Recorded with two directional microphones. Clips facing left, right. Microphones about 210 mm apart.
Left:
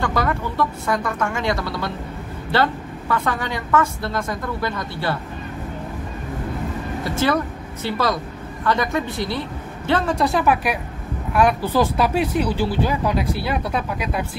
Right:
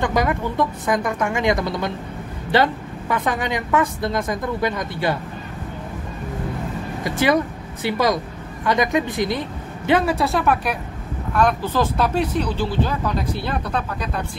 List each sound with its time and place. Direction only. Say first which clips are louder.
0.0 s a woman's voice: right 2 dB; 15° right (ahead or behind)
7.0 s a woman's voice: right 2 dB; 15° right (ahead or behind); by 14.2 s 10° left (ahead or behind)